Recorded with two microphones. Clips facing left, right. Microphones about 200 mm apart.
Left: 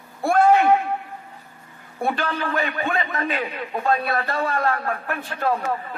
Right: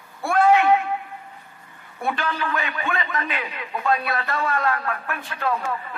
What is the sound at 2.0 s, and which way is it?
A man's voice, 50° left (ahead or behind).